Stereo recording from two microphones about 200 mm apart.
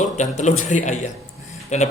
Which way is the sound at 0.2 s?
35° left (ahead or behind).